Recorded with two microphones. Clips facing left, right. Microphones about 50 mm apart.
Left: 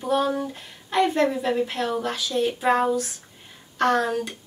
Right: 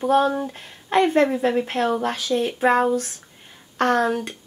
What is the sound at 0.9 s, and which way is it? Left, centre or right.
Speech, right.